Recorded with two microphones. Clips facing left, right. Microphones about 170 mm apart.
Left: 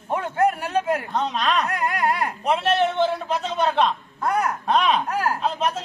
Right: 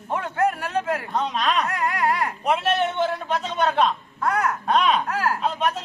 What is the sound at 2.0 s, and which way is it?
Speech, 15° left (ahead or behind).